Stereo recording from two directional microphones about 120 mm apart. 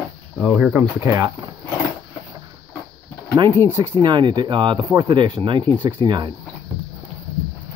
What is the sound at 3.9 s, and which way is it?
Speech, 40° right (ahead or behind).